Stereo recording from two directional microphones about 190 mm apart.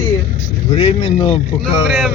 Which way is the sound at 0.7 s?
30° left (ahead or behind).